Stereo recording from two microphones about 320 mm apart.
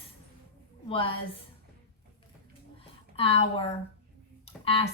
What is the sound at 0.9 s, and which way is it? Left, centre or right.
Speech, centre.